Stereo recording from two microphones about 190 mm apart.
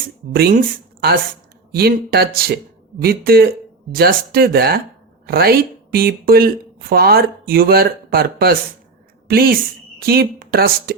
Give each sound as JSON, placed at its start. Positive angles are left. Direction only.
{"t": 0.3, "sound": "a woman's voice", "side_deg": -50}